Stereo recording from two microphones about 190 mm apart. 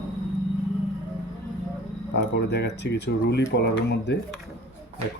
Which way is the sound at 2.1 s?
60° left (ahead or behind).